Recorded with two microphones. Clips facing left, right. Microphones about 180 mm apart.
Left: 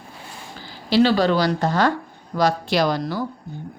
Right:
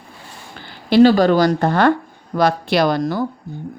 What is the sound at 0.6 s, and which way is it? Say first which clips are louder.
A woman's voice: right 6 dB; 55° right (ahead or behind).